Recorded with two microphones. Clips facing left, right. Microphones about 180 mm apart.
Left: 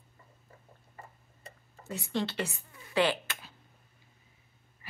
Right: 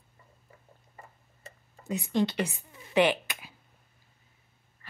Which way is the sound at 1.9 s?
15° right (ahead or behind).